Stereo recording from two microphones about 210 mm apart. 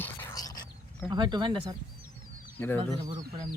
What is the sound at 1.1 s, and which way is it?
Speech, 20° right (ahead or behind).